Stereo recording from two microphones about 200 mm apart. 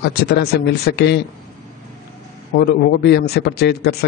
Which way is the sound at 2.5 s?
55° left (ahead or behind).